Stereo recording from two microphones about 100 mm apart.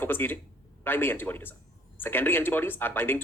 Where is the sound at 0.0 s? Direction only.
20° left (ahead or behind).